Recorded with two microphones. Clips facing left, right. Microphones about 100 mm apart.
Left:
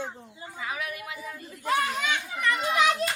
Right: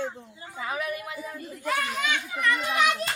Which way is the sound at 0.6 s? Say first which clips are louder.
Right 3 dB; 35° right (ahead or behind).